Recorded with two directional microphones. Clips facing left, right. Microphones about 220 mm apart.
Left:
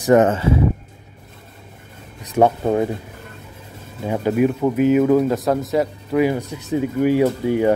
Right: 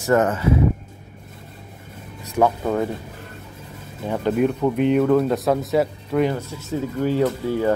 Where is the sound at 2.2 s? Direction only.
25° left (ahead or behind).